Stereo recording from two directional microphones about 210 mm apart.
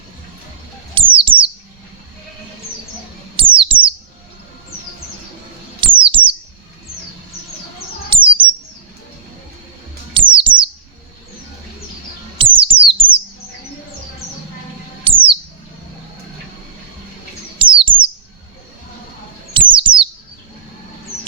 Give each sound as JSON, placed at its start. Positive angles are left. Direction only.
{"t": 0.9, "sound": "a sound", "side_deg": -25}
{"t": 3.3, "sound": "a sound", "side_deg": -25}
{"t": 5.8, "sound": "a sound", "side_deg": -25}
{"t": 8.1, "sound": "bird", "side_deg": -25}
{"t": 10.2, "sound": "bird", "side_deg": -25}
{"t": 12.4, "sound": "bird", "side_deg": -25}
{"t": 15.0, "sound": "bird", "side_deg": -25}
{"t": 17.6, "sound": "bird", "side_deg": -25}
{"t": 19.5, "sound": "bird", "side_deg": -25}